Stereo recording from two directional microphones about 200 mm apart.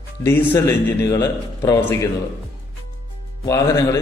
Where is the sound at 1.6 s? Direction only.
20° left (ahead or behind).